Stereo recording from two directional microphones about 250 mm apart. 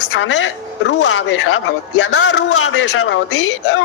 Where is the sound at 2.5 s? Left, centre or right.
Left.